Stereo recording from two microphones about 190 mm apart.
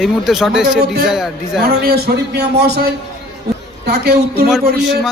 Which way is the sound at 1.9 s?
55° right (ahead or behind).